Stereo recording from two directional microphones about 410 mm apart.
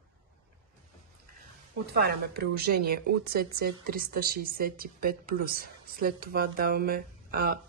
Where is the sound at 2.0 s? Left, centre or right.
Right.